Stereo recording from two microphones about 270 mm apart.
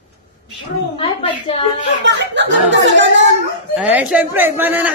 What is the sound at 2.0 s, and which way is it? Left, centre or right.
Speech, right.